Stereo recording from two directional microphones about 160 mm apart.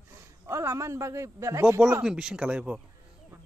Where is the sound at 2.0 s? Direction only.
5° right (ahead or behind).